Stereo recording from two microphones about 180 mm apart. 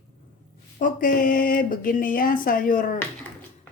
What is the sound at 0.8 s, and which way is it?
Speech, 50° left (ahead or behind).